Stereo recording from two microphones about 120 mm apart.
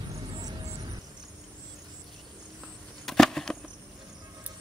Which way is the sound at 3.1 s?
5° left (ahead or behind).